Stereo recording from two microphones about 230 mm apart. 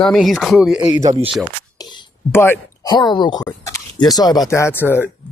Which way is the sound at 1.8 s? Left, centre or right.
Centre.